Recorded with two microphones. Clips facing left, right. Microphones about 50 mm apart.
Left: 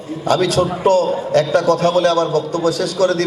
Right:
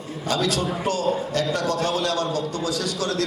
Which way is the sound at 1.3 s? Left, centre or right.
Left.